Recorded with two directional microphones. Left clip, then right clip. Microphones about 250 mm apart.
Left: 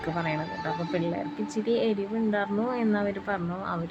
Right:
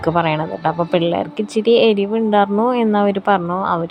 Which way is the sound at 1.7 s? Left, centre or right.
Centre.